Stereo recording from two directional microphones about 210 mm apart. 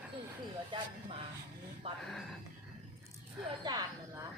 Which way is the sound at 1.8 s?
25° right (ahead or behind).